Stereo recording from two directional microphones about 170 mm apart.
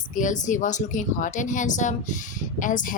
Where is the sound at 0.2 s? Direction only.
50° left (ahead or behind).